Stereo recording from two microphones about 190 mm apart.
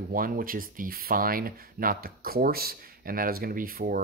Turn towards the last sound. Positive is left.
turn(degrees=-50)  # may be behind; listen again after turning